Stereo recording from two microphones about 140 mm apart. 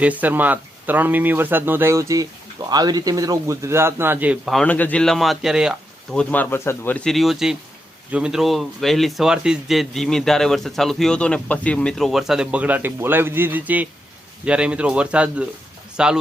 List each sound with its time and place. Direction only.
0.0 s a man's voice: 10° right (ahead or behind)
4.4 s speech: centre (ahead or behind)
6.1 s speech: 10° left (ahead or behind); by 16.1 s 5° right (ahead or behind)